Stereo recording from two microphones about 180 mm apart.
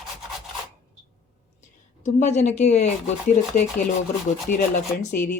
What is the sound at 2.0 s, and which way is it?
Speech, 40° left (ahead or behind).